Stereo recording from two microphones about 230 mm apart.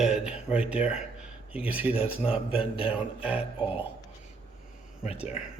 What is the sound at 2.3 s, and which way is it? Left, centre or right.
Speech, left.